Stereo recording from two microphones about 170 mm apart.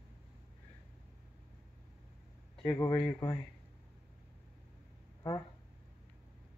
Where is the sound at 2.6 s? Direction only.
25° left (ahead or behind).